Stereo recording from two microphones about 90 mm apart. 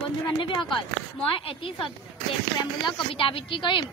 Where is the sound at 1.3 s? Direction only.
80° left.